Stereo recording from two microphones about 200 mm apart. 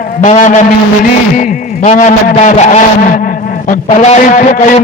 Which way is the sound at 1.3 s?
40° left (ahead or behind).